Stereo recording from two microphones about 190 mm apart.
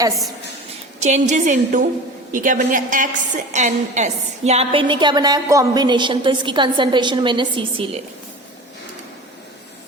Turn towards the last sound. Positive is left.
turn(degrees=-30)  # may be behind; listen again after turning